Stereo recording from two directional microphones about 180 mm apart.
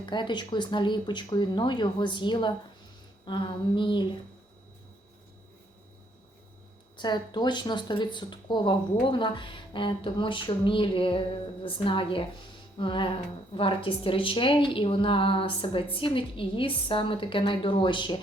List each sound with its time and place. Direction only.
0.0 s a woman's voice: 25° left (ahead or behind)
6.9 s a woman's voice: 25° left (ahead or behind)